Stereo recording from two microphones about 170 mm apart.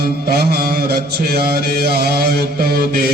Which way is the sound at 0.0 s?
65° right (ahead or behind).